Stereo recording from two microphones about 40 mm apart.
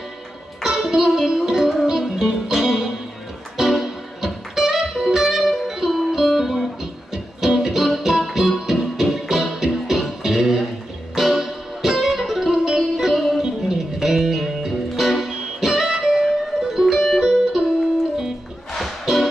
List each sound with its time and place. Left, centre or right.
0.6 s music: centre
17.2 s music: centre
18.7 s music: centre